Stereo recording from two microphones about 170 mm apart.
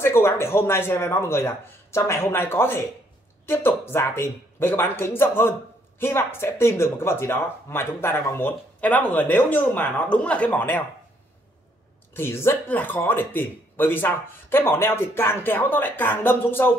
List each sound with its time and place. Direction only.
0.0 s speech: 15° left (ahead or behind)
12.1 s speech: 15° left (ahead or behind)